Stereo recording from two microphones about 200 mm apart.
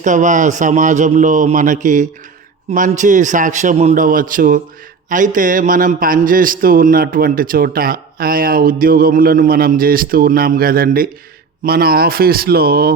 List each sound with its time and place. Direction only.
0.0 s a man's voice: 40° right (ahead or behind)